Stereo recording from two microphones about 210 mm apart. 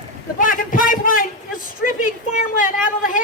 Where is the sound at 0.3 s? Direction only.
40° left (ahead or behind).